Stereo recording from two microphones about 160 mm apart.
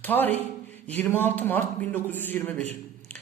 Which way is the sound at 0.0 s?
10° left (ahead or behind).